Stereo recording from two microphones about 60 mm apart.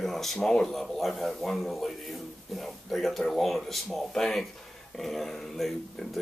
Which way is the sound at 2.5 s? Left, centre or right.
Centre.